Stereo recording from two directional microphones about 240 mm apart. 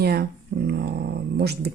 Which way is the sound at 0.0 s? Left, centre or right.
Right.